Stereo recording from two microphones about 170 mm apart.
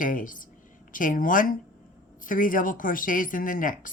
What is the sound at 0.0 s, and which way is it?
Speech, 55° left (ahead or behind).